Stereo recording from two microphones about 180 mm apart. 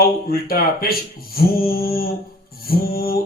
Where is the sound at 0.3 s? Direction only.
55° left (ahead or behind).